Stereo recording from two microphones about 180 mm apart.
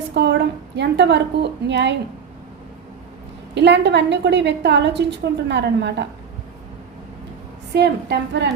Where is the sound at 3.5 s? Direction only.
75° right (ahead or behind).